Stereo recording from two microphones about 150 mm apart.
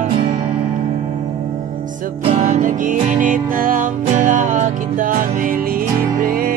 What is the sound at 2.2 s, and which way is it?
Music, 45° right (ahead or behind).